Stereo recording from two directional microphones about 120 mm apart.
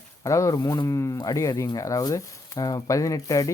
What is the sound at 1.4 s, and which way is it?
Speech, 25° left (ahead or behind).